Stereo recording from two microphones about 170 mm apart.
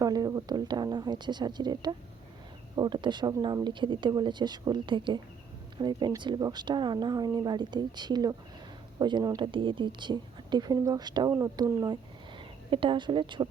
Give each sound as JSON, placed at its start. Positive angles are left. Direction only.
{"t": 0.0, "sound": "speech", "side_deg": -20}